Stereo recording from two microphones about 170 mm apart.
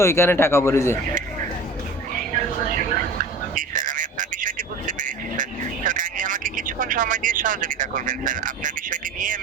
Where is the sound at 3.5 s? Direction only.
50° right (ahead or behind).